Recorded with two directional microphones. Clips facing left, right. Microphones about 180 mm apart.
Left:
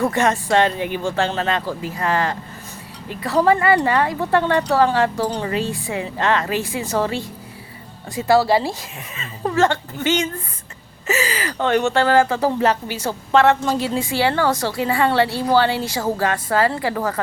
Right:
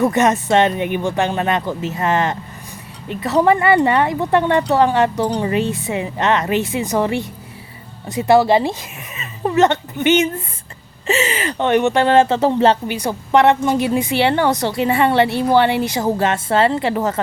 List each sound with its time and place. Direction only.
0.0 s speech: 20° right (ahead or behind)